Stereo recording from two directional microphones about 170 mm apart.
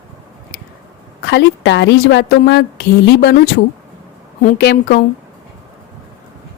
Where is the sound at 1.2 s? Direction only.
85° left.